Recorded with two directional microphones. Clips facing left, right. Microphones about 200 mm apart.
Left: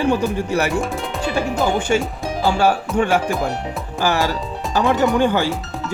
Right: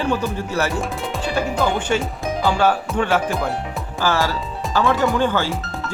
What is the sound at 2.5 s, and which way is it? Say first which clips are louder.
Music: left 4 dB; 10° left (ahead or behind).